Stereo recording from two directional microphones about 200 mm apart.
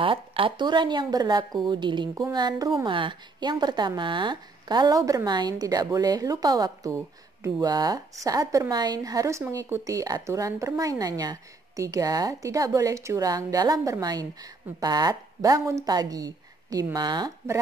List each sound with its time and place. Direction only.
0.0 s a woman's voice: 25° right (ahead or behind)